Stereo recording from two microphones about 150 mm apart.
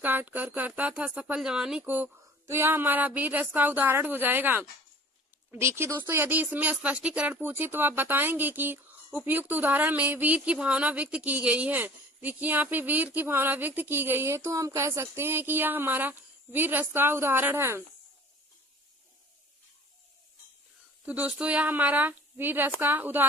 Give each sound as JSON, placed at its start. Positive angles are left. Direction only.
{"t": 0.0, "sound": "speech", "side_deg": -10}
{"t": 21.0, "sound": "speech", "side_deg": -10}